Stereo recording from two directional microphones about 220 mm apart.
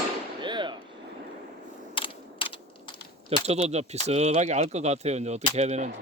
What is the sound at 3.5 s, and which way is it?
Speech, 30° right (ahead or behind).